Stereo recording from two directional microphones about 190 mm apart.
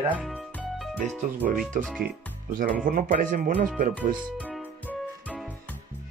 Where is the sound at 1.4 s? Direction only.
45° right (ahead or behind).